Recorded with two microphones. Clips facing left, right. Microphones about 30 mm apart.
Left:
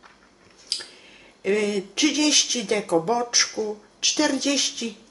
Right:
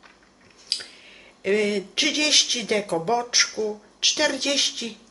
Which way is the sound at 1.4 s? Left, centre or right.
Right.